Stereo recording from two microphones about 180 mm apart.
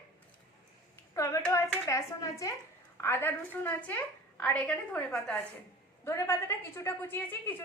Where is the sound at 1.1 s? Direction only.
15° left (ahead or behind).